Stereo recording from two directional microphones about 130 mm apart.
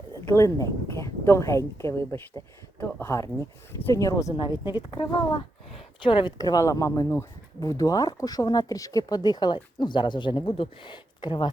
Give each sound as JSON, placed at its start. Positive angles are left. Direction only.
{"t": 0.3, "sound": "speech", "side_deg": 25}
{"t": 4.4, "sound": "speech", "side_deg": 35}